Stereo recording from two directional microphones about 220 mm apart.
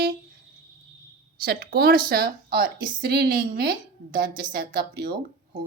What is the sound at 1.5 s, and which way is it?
Speech, 45° right (ahead or behind).